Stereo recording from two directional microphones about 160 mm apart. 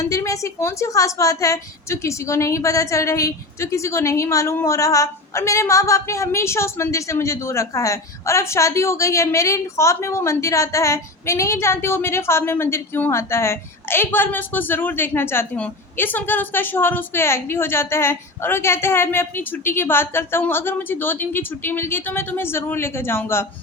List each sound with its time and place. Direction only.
0.1 s a woman's voice: 20° left (ahead or behind)